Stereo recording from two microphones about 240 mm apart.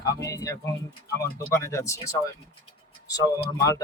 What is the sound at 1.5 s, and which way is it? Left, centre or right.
Speech, centre.